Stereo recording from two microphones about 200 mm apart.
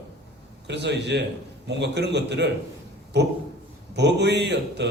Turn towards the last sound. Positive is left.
turn(degrees=-60)  # may be behind; listen again after turning